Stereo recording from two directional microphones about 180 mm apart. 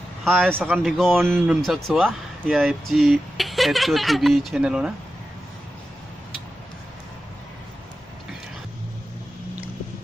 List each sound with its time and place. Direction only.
0.2 s a man's voice: centre (ahead or behind)
1.2 s speech: 10° right (ahead or behind)
1.6 s speech: centre (ahead or behind)